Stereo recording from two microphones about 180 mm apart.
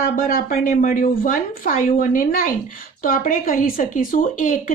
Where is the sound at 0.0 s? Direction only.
50° left (ahead or behind).